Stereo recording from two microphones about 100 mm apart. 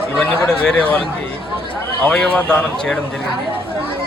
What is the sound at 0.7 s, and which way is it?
Speech, 15° left (ahead or behind).